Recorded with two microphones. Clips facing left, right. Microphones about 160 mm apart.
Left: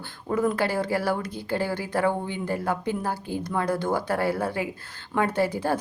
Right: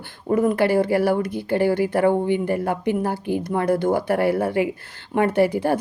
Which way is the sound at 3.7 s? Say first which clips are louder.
Right 7 dB; 55° right (ahead or behind).